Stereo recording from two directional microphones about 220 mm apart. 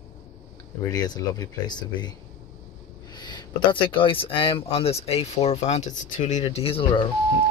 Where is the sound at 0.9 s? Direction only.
15° left (ahead or behind).